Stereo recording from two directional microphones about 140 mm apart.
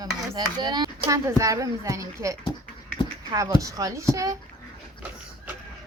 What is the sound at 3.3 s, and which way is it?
Speech, 25° right (ahead or behind).